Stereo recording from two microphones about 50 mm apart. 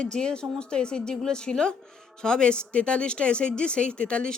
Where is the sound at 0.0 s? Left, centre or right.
Centre.